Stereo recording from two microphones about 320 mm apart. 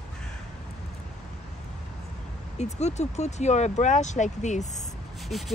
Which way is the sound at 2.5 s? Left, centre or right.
Left.